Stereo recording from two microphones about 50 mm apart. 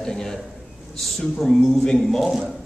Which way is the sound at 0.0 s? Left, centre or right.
Centre.